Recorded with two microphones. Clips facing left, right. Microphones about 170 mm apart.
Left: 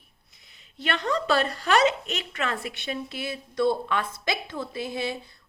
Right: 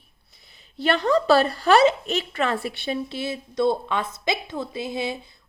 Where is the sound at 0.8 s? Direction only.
35° right (ahead or behind).